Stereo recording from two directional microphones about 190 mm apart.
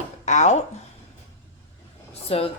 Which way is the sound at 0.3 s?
35° left (ahead or behind).